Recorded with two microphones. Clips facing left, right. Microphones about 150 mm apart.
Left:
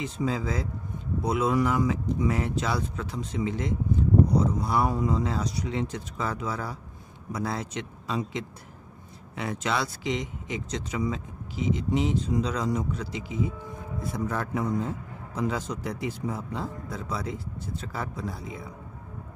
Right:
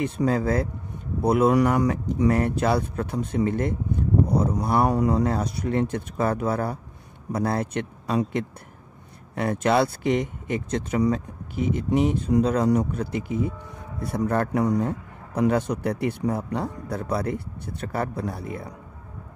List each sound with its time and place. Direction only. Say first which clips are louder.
0.0 s a man's voice: right 6 dB; 60° right (ahead or behind)